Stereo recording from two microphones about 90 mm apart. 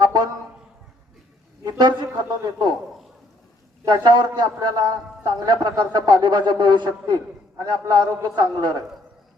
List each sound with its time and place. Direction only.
0.0 s a sound: 50° right (ahead or behind)
1.8 s a man's voice: 50° right (ahead or behind)
3.8 s a man's voice: 55° right (ahead or behind)